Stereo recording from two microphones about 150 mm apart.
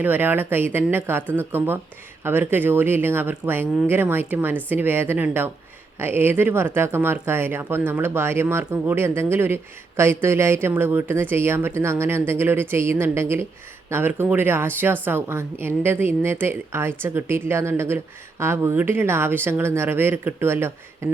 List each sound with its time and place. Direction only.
0.0 s a woman's voice: 10° right (ahead or behind)